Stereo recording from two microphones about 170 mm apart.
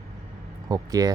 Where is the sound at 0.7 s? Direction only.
20° right (ahead or behind).